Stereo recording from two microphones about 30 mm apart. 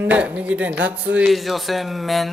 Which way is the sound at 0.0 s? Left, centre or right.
Right.